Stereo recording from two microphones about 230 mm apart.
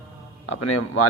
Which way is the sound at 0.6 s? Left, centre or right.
Left.